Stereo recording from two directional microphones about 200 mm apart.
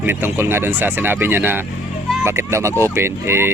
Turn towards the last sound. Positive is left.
turn(degrees=-15)  # may be behind; listen again after turning